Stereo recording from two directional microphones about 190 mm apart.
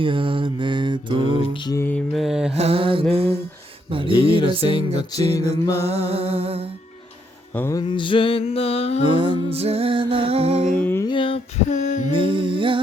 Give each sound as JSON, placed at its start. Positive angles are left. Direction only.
{"t": 0.0, "sound": "mantra", "side_deg": -25}
{"t": 1.4, "sound": "music", "side_deg": 25}
{"t": 1.8, "sound": "mantra", "side_deg": 5}
{"t": 2.6, "sound": "mantra", "side_deg": -30}
{"t": 3.9, "sound": "speech", "side_deg": -30}
{"t": 4.4, "sound": "music", "side_deg": 25}
{"t": 5.8, "sound": "music", "side_deg": -30}
{"t": 7.5, "sound": "music", "side_deg": 15}
{"t": 9.2, "sound": "music", "side_deg": -30}
{"t": 10.8, "sound": "music", "side_deg": 10}
{"t": 11.1, "sound": "female singing", "side_deg": 25}
{"t": 12.1, "sound": "humming", "side_deg": -25}